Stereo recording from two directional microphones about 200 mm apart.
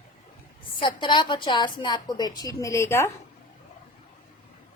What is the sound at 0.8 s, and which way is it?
A woman's voice, 25° left (ahead or behind).